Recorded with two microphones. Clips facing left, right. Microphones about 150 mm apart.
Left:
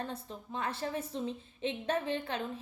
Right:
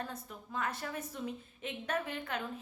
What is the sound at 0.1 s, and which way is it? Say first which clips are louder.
A woman's voice: left 2 dB; 30° left (ahead or behind).